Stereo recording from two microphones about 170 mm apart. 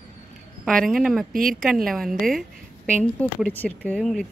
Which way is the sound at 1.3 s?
55° right (ahead or behind).